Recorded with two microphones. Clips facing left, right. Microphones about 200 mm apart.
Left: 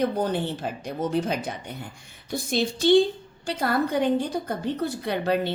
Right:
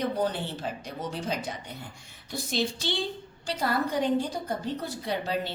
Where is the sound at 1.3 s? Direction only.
55° left (ahead or behind).